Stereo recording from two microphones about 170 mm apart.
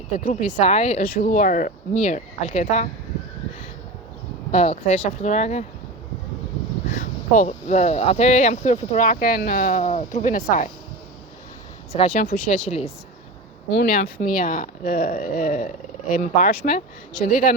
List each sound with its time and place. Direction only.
0.1 s speech: 50° left (ahead or behind)
4.5 s speech: 40° left (ahead or behind)
6.9 s speech: 50° left (ahead or behind)
11.9 s speech: 45° left (ahead or behind)
13.7 s speech: 75° left (ahead or behind)
14.2 s speech: 55° left (ahead or behind)